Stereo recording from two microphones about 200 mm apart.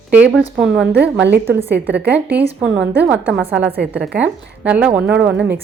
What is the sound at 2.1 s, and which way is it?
A woman's voice, 5° right (ahead or behind).